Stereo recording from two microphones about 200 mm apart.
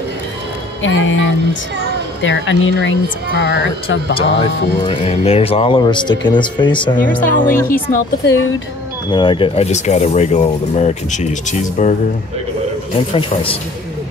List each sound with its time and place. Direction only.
0.8 s speech: 70° left (ahead or behind)
4.1 s speech: 30° left (ahead or behind)
7.2 s speech: 40° left (ahead or behind)
9.1 s speech: 25° left (ahead or behind)
12.9 s speech: 25° left (ahead or behind)